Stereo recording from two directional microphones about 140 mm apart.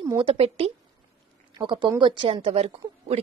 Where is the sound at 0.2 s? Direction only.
45° right (ahead or behind).